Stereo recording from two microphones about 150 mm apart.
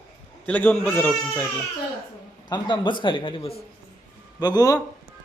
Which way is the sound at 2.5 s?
30° left (ahead or behind).